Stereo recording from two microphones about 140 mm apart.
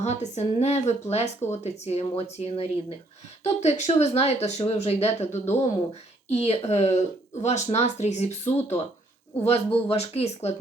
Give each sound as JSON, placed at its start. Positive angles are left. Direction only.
{"t": 0.0, "sound": "speech", "side_deg": 55}